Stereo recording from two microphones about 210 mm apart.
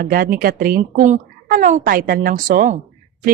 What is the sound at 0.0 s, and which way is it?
A woman's voice, 45° right (ahead or behind).